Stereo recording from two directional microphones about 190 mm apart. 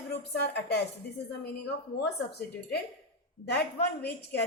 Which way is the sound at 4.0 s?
55° left (ahead or behind).